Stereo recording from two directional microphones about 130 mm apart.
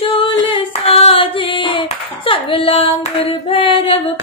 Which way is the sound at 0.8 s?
45° left (ahead or behind).